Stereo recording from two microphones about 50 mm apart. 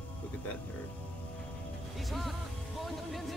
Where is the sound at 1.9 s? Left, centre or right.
Centre.